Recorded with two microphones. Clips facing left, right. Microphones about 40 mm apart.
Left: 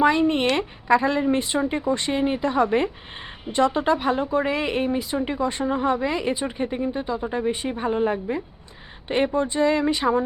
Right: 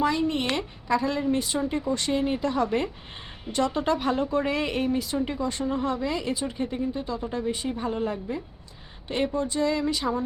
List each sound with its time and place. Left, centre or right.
0.0 s a woman's voice: left